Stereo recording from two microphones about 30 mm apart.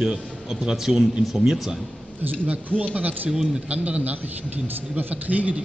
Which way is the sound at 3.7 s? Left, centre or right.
Right.